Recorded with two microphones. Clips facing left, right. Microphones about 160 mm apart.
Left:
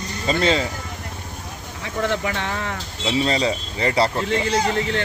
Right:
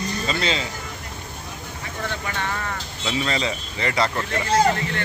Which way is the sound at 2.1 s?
90° left.